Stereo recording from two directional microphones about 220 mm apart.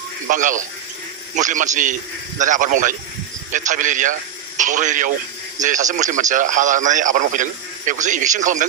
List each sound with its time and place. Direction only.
0.3 s a man's voice: 35° right (ahead or behind)